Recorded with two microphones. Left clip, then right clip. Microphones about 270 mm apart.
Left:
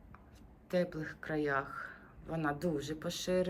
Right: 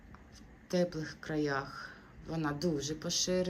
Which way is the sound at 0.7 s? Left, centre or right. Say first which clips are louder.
Right 1 dB; centre.